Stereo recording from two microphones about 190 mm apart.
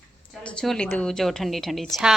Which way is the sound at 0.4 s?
5° left (ahead or behind).